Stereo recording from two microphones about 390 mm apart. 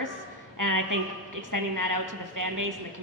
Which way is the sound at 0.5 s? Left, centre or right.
Right.